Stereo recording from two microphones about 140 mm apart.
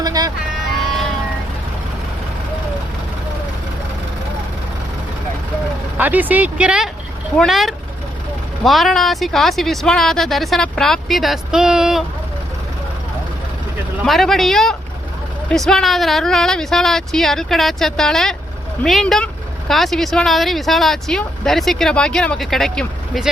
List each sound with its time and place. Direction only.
0.0 s music: 25° right (ahead or behind)
6.0 s speech: 10° right (ahead or behind)
14.0 s speech: centre (ahead or behind)